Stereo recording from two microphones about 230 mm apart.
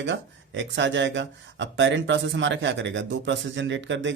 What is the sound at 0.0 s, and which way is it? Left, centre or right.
Speech, right.